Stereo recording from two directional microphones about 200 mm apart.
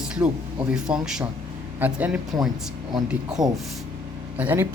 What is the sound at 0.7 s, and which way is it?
A man's voice, 5° right (ahead or behind).